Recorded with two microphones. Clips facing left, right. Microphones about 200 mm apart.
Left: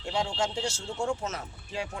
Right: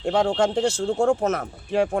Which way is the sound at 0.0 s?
55° right (ahead or behind).